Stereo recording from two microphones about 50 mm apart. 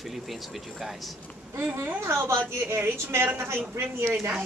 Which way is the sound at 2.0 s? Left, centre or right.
Right.